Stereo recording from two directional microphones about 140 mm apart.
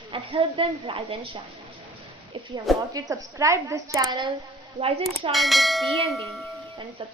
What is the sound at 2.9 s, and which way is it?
A woman's voice, 25° right (ahead or behind).